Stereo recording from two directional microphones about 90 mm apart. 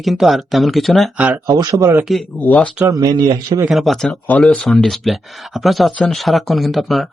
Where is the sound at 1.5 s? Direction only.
40° right (ahead or behind).